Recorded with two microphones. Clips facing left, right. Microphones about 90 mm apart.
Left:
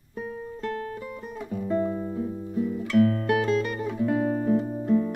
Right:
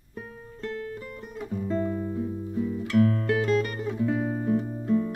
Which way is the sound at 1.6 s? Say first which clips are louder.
Left 2 dB; 15° left (ahead or behind).